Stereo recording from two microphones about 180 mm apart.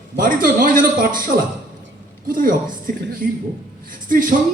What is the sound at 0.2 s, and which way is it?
A man's voice, 50° right (ahead or behind).